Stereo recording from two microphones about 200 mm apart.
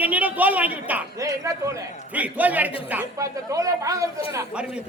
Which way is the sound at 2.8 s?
10° right (ahead or behind).